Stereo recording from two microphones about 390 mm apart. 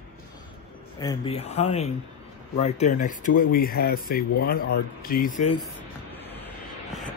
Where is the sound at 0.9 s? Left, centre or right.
Centre.